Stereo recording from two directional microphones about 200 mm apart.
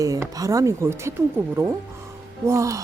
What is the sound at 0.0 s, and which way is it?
A woman's voice, 15° right (ahead or behind).